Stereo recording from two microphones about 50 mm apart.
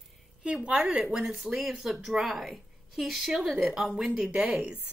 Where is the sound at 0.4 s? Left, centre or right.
Centre.